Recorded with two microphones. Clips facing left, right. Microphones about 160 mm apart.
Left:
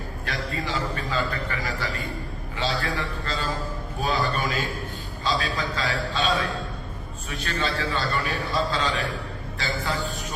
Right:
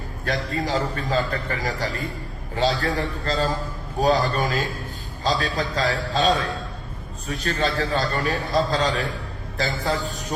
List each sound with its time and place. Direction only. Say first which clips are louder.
0.3 s a man's voice: right 6 dB; 40° right (ahead or behind)